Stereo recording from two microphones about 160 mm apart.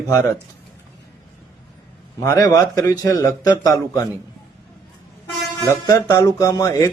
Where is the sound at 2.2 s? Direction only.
20° left (ahead or behind).